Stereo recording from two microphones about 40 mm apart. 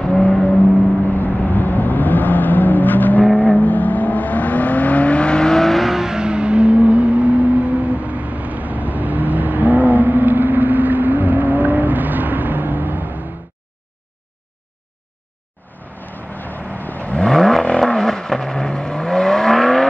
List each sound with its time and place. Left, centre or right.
1.0 s vehicle: left
5.5 s vehicle: centre
5.8 s vehicle: centre
6.0 s vehicle: centre; by 13.2 s right
16.3 s vehicle: left
17.2 s vehicle: centre